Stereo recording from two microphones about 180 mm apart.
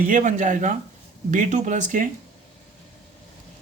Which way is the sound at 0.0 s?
45° right (ahead or behind).